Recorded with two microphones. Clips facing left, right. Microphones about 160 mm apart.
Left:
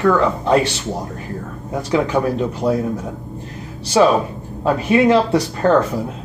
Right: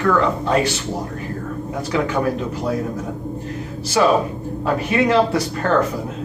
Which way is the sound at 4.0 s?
25° left (ahead or behind).